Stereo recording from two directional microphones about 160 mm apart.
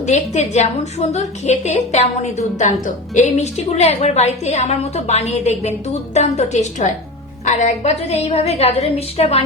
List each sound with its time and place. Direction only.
0.0 s a woman's voice: 45° left (ahead or behind)